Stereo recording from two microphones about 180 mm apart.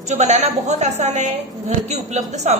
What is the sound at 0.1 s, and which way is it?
A woman's voice, 40° right (ahead or behind).